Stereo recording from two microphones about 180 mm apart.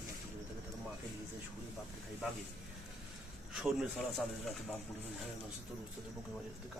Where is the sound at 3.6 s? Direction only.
5° right (ahead or behind).